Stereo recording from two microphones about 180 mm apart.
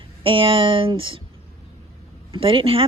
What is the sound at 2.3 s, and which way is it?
Speech, 30° right (ahead or behind).